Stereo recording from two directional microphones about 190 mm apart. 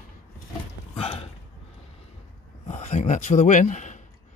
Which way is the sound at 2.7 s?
35° left (ahead or behind).